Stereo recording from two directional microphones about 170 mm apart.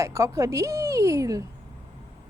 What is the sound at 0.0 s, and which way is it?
A woman's voice, 15° right (ahead or behind).